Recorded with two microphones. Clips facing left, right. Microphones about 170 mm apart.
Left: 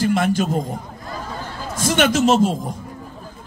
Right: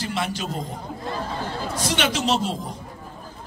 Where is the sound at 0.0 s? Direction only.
50° left (ahead or behind).